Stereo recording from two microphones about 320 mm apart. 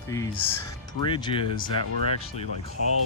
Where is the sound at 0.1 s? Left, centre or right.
Centre.